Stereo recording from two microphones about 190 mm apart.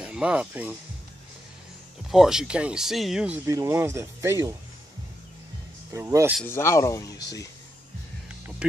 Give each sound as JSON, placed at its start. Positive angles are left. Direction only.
{"t": 0.0, "sound": "speech", "side_deg": -5}
{"t": 2.0, "sound": "speech", "side_deg": 0}
{"t": 3.4, "sound": "speech", "side_deg": -15}
{"t": 5.9, "sound": "speech", "side_deg": -15}
{"t": 6.4, "sound": "speech", "side_deg": 15}